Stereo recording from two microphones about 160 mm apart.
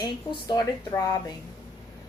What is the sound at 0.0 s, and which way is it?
A woman's voice, 25° left (ahead or behind).